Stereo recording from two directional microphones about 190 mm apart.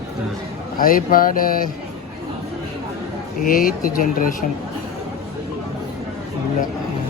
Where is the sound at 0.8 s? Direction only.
45° left (ahead or behind).